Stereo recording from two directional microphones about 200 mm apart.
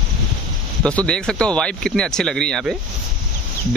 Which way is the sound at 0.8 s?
5° left (ahead or behind).